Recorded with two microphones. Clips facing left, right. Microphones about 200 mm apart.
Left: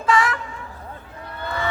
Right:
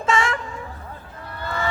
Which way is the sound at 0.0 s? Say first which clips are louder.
Left 1 dB; 25° right (ahead or behind).